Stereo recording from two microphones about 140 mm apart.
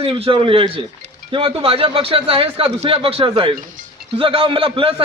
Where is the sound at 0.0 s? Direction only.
40° right (ahead or behind).